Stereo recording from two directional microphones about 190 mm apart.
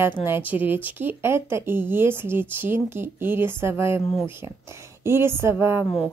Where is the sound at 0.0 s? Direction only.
10° right (ahead or behind).